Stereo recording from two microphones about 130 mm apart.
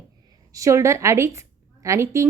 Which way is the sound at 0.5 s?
25° right (ahead or behind).